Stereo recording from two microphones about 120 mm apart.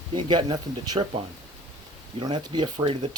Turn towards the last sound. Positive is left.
turn(degrees=-45)  # may be behind; listen again after turning